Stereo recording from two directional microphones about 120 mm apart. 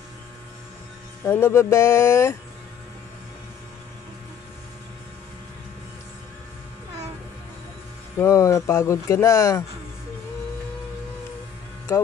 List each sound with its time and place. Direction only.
1.2 s speech: 20° left (ahead or behind)
8.2 s speech: 25° left (ahead or behind)
11.9 s speech: 25° left (ahead or behind)